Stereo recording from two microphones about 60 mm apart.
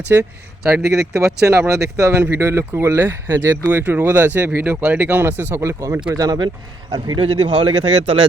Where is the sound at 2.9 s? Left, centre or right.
Right.